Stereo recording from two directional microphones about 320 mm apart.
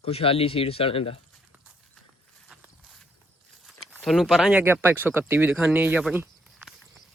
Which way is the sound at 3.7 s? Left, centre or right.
Centre.